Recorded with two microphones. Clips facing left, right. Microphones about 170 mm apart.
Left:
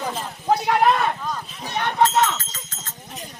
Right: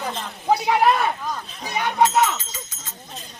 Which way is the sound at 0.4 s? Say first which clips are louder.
Even; 10° right (ahead or behind).